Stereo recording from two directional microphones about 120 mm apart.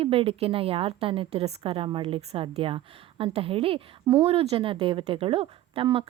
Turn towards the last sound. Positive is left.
turn(degrees=-50)  # may be behind; listen again after turning